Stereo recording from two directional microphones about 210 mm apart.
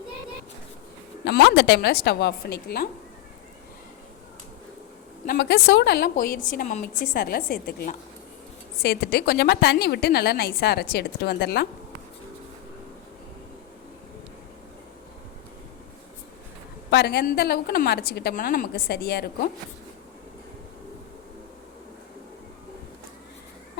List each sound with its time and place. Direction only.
1.2 s a woman's voice: 55° left (ahead or behind)
5.2 s a woman's voice: 50° left (ahead or behind)
16.9 s a woman's voice: 50° left (ahead or behind)